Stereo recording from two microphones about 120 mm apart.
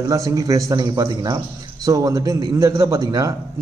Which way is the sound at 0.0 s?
30° right (ahead or behind).